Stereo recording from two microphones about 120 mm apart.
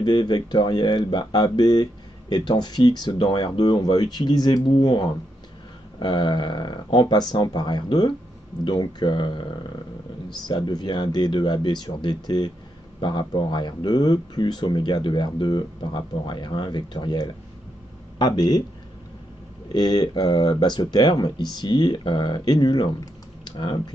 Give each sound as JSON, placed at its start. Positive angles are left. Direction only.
{"t": 0.0, "sound": "speech", "side_deg": 35}
{"t": 19.7, "sound": "speech", "side_deg": 35}